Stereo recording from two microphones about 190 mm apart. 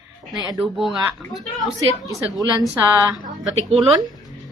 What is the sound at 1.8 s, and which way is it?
A woman's voice, 15° right (ahead or behind).